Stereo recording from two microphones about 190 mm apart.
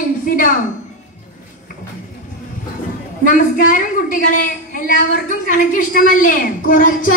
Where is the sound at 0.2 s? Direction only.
45° left (ahead or behind).